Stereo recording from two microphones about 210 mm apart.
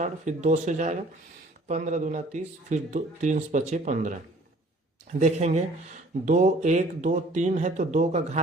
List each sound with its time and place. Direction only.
0.0 s speech: 35° right (ahead or behind)
5.2 s speech: 30° right (ahead or behind)